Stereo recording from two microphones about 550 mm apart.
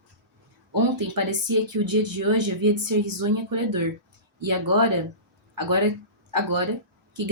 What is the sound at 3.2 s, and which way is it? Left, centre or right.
Speech, right.